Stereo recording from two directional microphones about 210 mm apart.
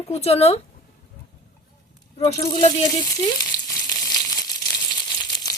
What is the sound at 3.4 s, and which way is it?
Frying, 15° left (ahead or behind).